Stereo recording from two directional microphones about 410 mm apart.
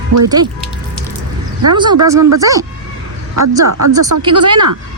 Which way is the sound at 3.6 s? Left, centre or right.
Right.